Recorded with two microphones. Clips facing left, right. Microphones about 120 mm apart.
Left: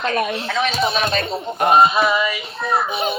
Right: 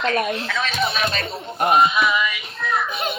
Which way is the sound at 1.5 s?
40° left (ahead or behind).